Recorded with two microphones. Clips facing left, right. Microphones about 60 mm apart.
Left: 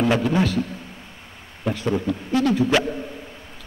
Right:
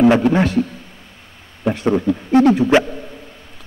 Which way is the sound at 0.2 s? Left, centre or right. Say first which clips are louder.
Right 5 dB; right.